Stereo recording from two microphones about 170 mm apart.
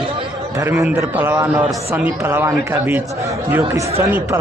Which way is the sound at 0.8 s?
15° right (ahead or behind).